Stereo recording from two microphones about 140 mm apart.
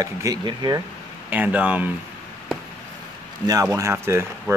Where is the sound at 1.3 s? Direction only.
10° right (ahead or behind).